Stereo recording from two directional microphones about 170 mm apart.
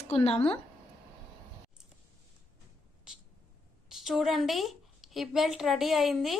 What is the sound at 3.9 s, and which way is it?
A woman's voice, centre (ahead or behind).